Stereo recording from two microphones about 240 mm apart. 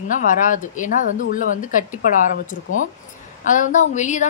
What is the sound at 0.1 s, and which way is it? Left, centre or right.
A woman's voice, left.